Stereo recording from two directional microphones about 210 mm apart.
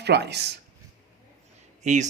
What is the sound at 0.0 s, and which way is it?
Speech, 50° right (ahead or behind).